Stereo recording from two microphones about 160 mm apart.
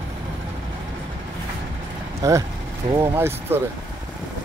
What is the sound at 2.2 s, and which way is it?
Speech, 20° right (ahead or behind).